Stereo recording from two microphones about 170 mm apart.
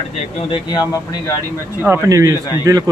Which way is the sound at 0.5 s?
25° left (ahead or behind).